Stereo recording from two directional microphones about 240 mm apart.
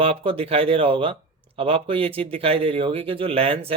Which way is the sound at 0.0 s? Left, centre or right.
Right.